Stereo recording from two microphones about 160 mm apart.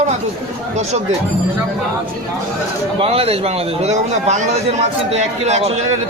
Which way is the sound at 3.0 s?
40° right (ahead or behind).